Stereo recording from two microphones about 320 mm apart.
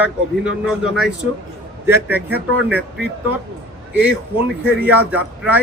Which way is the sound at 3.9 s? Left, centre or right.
Centre.